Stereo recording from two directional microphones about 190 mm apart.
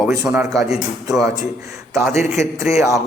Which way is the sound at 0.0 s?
5° right (ahead or behind).